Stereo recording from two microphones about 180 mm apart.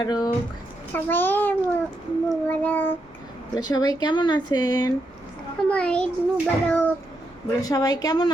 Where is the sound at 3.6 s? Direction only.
20° left (ahead or behind).